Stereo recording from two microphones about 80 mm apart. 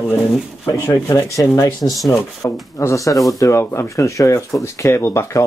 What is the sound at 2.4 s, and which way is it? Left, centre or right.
Speech, left.